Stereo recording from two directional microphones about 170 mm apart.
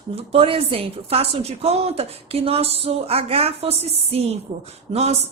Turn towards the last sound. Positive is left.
turn(degrees=-40)  # may be behind; listen again after turning